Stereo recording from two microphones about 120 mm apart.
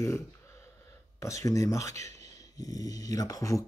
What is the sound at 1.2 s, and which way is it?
Speech, 25° left (ahead or behind).